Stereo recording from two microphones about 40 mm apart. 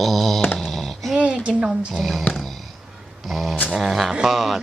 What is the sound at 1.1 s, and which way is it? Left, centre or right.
Speech, right.